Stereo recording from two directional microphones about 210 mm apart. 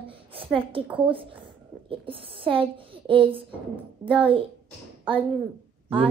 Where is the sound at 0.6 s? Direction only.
25° right (ahead or behind).